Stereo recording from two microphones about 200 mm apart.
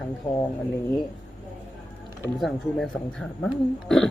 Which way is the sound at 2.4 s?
Centre (ahead or behind).